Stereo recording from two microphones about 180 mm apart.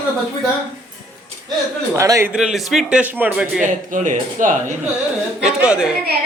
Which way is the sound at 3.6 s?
45° right (ahead or behind).